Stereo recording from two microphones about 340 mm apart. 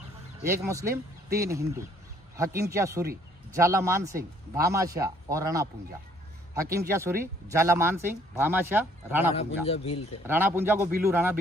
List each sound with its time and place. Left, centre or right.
0.4 s speech: centre
9.3 s a man's voice: centre
10.2 s speech: centre